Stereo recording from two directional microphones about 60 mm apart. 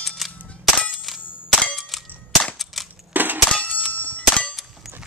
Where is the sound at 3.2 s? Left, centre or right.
Right.